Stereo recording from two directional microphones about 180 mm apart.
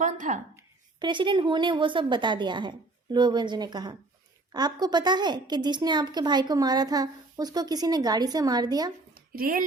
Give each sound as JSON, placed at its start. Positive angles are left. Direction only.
{"t": 0.0, "sound": "a sound", "side_deg": -45}
{"t": 0.9, "sound": "a woman's voice", "side_deg": -25}
{"t": 9.3, "sound": "speech", "side_deg": -55}